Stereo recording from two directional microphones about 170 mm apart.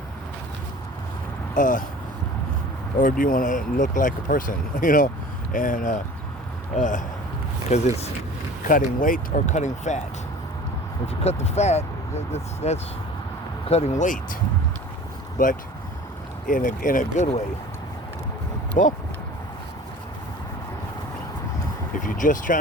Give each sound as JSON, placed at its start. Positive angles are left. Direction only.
{"t": 1.5, "sound": "speech", "side_deg": 50}
{"t": 3.0, "sound": "speech", "side_deg": 55}
{"t": 8.6, "sound": "speech", "side_deg": 50}
{"t": 11.0, "sound": "speech", "side_deg": 40}
{"t": 15.4, "sound": "speech", "side_deg": 50}
{"t": 18.8, "sound": "speech", "side_deg": 50}
{"t": 22.0, "sound": "speech", "side_deg": 50}